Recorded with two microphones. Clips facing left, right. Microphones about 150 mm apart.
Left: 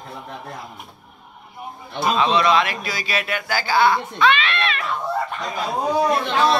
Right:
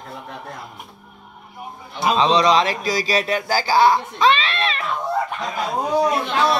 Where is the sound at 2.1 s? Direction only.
30° right (ahead or behind).